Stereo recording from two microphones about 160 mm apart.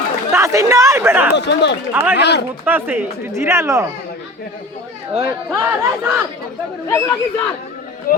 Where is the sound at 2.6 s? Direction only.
10° right (ahead or behind).